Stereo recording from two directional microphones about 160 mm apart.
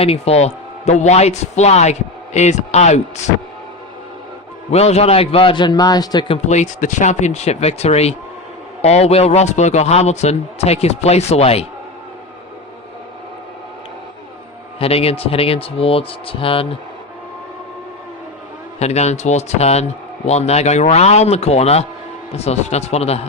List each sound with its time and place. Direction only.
0.0 s a man's voice: 40° left (ahead or behind)
4.7 s a man's voice: 40° left (ahead or behind)
14.8 s a man's voice: 40° left (ahead or behind)
18.8 s a man's voice: 45° left (ahead or behind)